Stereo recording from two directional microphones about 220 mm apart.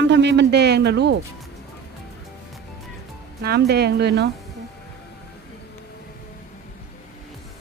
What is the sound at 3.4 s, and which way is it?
Speech, 45° right (ahead or behind).